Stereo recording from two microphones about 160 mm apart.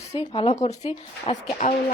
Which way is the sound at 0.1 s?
40° left (ahead or behind).